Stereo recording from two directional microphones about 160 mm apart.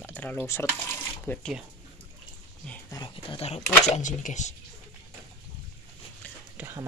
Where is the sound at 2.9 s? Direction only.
30° left (ahead or behind); by 4.5 s 50° left (ahead or behind).